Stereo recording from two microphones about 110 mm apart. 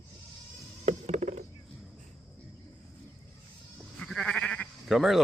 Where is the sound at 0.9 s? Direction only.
85° right.